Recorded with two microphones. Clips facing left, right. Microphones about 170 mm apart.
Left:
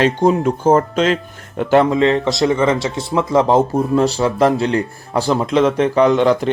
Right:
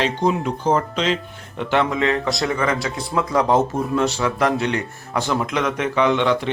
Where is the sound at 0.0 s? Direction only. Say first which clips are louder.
Left 6 dB; 45° left (ahead or behind).